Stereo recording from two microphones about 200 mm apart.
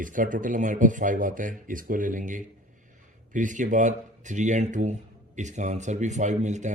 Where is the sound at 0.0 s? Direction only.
40° right (ahead or behind).